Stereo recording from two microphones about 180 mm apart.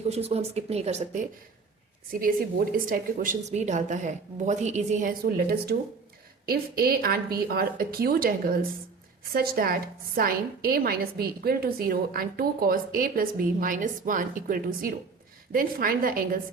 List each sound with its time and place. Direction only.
0.0 s speech: 35° right (ahead or behind)
2.7 s a woman's voice: 50° right (ahead or behind)